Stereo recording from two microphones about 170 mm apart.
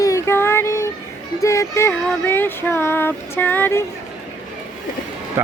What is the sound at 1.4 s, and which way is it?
Speech, 15° left (ahead or behind).